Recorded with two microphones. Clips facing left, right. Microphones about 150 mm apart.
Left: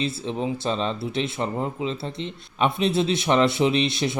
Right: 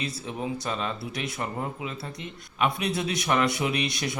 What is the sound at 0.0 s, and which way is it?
Speech, 25° left (ahead or behind).